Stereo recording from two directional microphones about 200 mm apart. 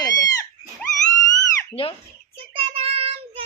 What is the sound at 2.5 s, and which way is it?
Child singing, 30° right (ahead or behind).